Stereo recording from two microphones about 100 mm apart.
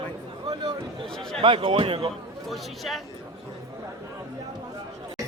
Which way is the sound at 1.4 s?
60° right (ahead or behind).